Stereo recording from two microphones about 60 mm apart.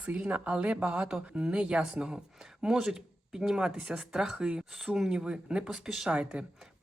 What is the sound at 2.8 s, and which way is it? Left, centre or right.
Speech, centre.